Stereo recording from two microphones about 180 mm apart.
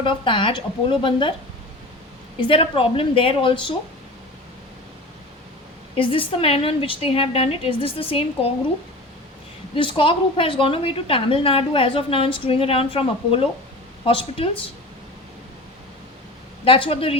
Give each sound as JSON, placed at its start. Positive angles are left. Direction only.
{"t": 0.0, "sound": "a woman's voice", "side_deg": 30}
{"t": 2.4, "sound": "a woman's voice", "side_deg": 30}
{"t": 6.0, "sound": "a woman's voice", "side_deg": 30}
{"t": 9.7, "sound": "a woman's voice", "side_deg": 30}
{"t": 16.6, "sound": "a woman's voice", "side_deg": 30}